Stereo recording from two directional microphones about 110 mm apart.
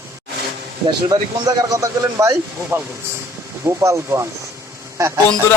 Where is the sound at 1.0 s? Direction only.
35° right (ahead or behind).